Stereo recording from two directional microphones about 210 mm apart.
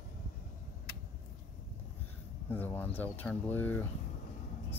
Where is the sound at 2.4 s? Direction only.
10° left (ahead or behind).